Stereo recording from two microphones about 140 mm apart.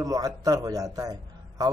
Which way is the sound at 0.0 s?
25° right (ahead or behind).